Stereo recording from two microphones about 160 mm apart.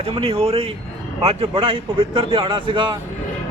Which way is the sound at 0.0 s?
35° right (ahead or behind).